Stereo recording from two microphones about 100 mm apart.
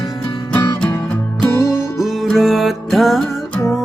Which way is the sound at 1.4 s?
30° left (ahead or behind).